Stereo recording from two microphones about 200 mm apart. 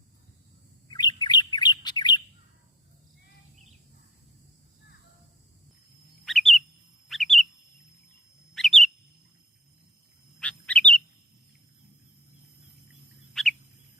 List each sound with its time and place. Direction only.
0.9 s bird: 20° left (ahead or behind)
6.2 s bird: centre (ahead or behind)
8.5 s bird: centre (ahead or behind)
10.4 s bird: 5° left (ahead or behind)
13.4 s bird: centre (ahead or behind)